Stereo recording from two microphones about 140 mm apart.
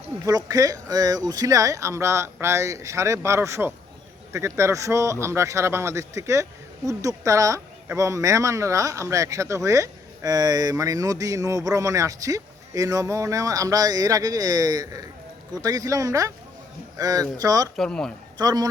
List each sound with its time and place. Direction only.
0.3 s speech: 25° right (ahead or behind)
17.7 s speech: 5° left (ahead or behind)
18.3 s speech: 30° right (ahead or behind)